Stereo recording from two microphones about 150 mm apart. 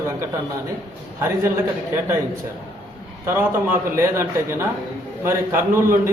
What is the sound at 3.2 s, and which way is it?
A man's voice, 15° right (ahead or behind).